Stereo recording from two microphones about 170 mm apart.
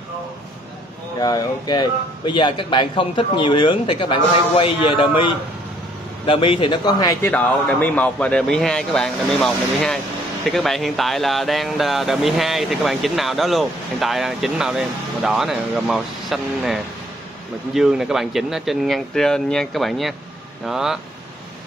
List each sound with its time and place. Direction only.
1.2 s a man's voice: 25° left (ahead or behind); by 21.0 s 5° right (ahead or behind)